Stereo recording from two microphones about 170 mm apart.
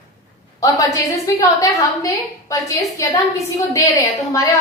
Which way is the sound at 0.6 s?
20° left (ahead or behind).